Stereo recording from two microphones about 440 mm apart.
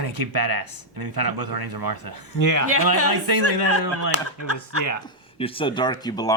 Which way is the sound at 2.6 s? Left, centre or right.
Right.